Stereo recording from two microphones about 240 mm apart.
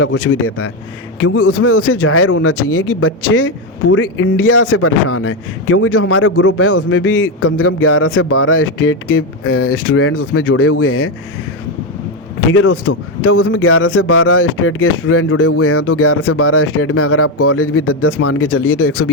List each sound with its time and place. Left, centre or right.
0.0 s a man's voice: left
3.9 s a man's voice: left
12.5 s a man's voice: left